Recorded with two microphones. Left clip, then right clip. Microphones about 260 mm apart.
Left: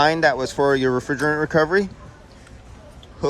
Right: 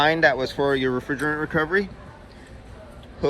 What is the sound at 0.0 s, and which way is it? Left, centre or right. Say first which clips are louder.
Speech: left 1 dB; centre.